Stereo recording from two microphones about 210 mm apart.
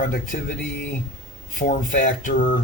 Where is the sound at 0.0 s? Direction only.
40° left (ahead or behind).